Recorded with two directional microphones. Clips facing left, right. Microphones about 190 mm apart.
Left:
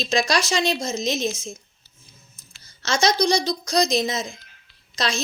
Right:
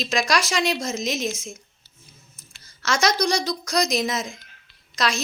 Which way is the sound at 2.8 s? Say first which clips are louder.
Left 1 dB; 25° left (ahead or behind).